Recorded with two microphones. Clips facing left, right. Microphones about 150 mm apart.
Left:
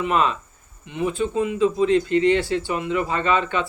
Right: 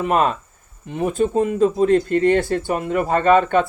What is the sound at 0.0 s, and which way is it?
Speech, 45° right (ahead or behind).